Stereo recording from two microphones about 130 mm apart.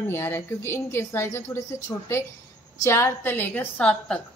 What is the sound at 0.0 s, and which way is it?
A woman's voice, 20° left (ahead or behind).